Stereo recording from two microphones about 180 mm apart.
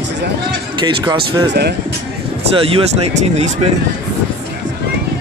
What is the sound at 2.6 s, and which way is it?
Speech, 30° right (ahead or behind).